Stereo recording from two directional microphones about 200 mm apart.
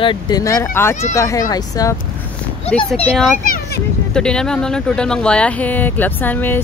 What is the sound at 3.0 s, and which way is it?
A child's voice, centre (ahead or behind).